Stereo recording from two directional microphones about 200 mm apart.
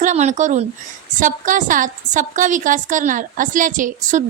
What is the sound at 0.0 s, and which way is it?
A woman's voice, 40° right (ahead or behind).